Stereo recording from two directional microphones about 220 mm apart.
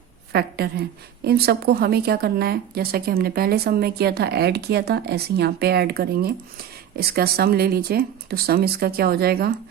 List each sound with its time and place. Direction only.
0.3 s a woman's voice: 45° right (ahead or behind)